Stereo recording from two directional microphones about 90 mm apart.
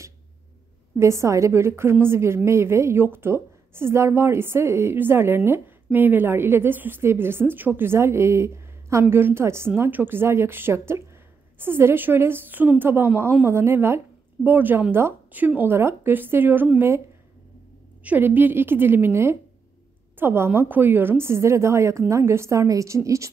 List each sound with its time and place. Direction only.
0.9 s a woman's voice: 30° right (ahead or behind)
18.0 s a woman's voice: 20° right (ahead or behind)